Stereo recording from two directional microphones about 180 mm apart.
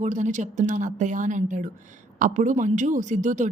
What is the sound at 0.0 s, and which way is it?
A woman's voice, 45° right (ahead or behind).